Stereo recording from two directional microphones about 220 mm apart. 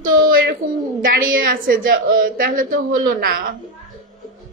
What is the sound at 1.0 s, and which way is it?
A woman's voice, 40° right (ahead or behind).